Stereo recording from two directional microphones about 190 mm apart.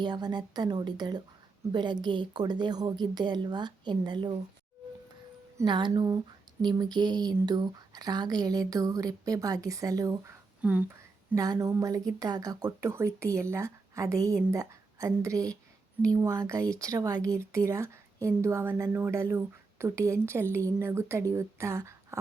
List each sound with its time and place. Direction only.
0.0 s a woman's voice: 20° right (ahead or behind)
5.5 s a woman's voice: 25° right (ahead or behind)